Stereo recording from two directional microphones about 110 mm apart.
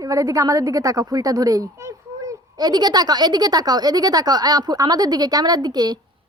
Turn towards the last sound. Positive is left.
turn(degrees=-40)  # may be behind; listen again after turning